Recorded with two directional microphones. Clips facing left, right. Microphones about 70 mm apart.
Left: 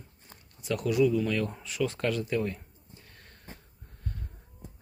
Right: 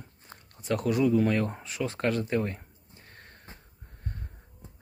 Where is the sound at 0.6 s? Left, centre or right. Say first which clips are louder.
Even; right.